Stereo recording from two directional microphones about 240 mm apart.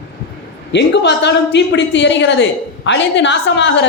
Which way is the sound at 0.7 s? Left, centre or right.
Left.